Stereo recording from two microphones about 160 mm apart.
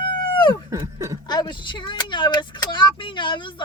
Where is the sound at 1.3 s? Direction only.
25° left (ahead or behind).